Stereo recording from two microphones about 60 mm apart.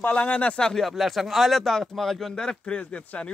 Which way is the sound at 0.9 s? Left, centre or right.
Centre.